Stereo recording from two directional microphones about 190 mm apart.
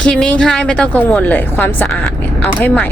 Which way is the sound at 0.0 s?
5° left (ahead or behind).